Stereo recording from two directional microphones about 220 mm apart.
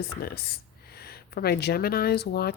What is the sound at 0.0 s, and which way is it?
Speech, 45° left (ahead or behind).